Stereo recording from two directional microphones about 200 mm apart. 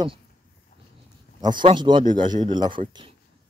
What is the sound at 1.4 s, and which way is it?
Speech, 25° right (ahead or behind).